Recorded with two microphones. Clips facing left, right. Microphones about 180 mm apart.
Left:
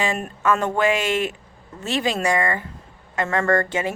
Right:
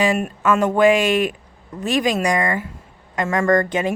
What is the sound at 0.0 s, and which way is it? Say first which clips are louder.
Speech: right 4 dB; 15° right (ahead or behind).